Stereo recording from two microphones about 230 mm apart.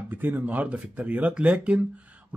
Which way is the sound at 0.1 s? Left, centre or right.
Centre.